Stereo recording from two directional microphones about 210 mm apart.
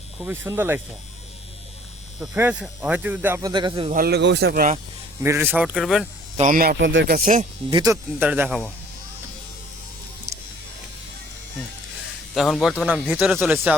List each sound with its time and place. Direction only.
0.2 s speech: 10° right (ahead or behind)
2.2 s speech: 5° right (ahead or behind)
3.5 s speech: 25° right (ahead or behind)
3.9 s speech: 50° right (ahead or behind)
5.2 s speech: 10° right (ahead or behind)
6.3 s speech: 35° right (ahead or behind)
7.7 s speech: 15° right (ahead or behind)
8.3 s speech: 5° right (ahead or behind)
12.3 s speech: centre (ahead or behind)